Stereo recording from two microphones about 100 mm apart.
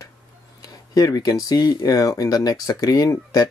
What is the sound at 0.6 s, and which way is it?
Speech, 40° left (ahead or behind).